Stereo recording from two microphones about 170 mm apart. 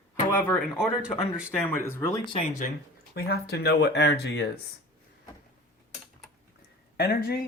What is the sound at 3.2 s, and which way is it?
Speech, 70° left (ahead or behind).